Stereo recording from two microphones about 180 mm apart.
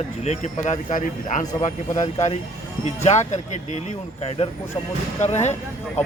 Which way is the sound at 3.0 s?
40° left (ahead or behind).